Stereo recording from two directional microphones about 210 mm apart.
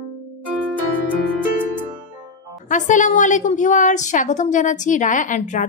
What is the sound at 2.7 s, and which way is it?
A woman's voice, 35° left (ahead or behind).